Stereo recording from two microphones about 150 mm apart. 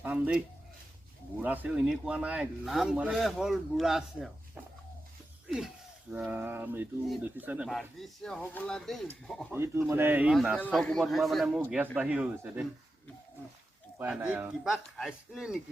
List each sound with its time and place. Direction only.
0.0 s speech: 10° right (ahead or behind)
7.7 s speech: centre (ahead or behind)
9.5 s speech: 15° right (ahead or behind)
14.0 s speech: 10° right (ahead or behind)